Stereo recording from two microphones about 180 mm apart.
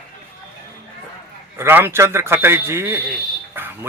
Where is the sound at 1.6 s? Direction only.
10° right (ahead or behind).